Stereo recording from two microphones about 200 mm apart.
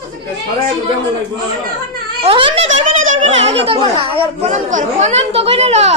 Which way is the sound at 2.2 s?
25° right (ahead or behind).